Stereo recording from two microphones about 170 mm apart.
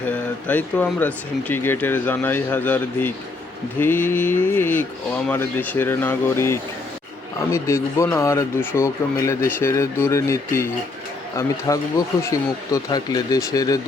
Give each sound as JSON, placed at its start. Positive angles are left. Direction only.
{"t": 0.0, "sound": "speech", "side_deg": 10}